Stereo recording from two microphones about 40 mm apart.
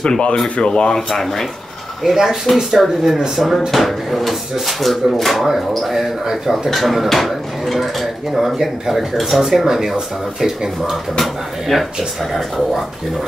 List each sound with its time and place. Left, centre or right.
0.0 s speech: left; by 1.5 s centre
2.5 s speech: centre
6.7 s speech: centre
11.1 s speech: centre